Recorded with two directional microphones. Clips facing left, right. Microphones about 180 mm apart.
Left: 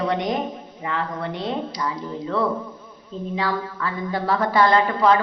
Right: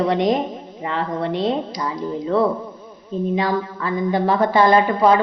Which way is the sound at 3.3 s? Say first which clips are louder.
Right 2 dB; 20° right (ahead or behind).